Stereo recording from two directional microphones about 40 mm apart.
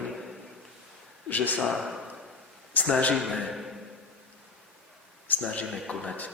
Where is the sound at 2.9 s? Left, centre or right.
Left.